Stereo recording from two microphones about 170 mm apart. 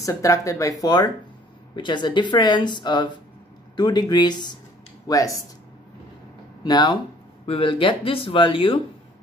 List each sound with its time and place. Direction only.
0.0 s speech: 20° left (ahead or behind)
6.6 s speech: 25° left (ahead or behind)